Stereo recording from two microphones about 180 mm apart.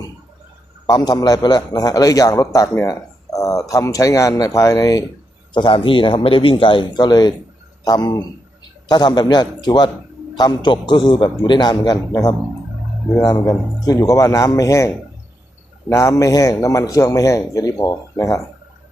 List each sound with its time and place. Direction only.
0.9 s a man's voice: 20° left (ahead or behind)